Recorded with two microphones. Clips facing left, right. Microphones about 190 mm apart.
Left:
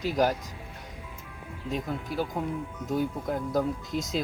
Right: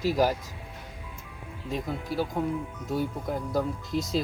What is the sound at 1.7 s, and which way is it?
Speech, centre (ahead or behind).